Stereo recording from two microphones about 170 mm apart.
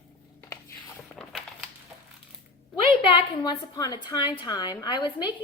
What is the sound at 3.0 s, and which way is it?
Speech, 30° left (ahead or behind).